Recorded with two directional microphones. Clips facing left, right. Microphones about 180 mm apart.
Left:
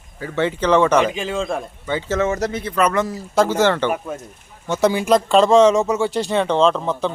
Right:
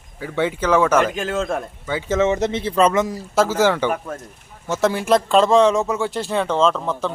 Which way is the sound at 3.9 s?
10° left (ahead or behind).